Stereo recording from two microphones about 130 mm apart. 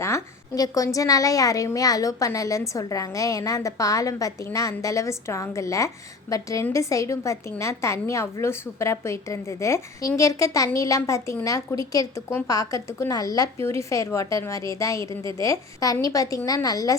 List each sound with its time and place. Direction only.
0.0 s a woman's voice: 25° left (ahead or behind)